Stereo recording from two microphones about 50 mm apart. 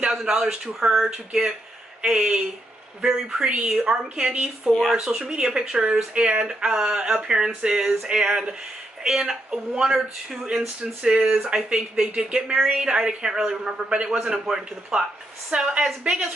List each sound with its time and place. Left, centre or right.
0.1 s speech: centre
0.7 s speech: centre
2.0 s speech: centre
3.0 s speech: centre
3.6 s speech: centre
5.0 s speech: centre
5.3 s speech: centre
15.5 s speech: right